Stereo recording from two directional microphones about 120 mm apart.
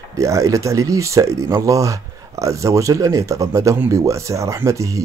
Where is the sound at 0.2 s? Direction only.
25° right (ahead or behind).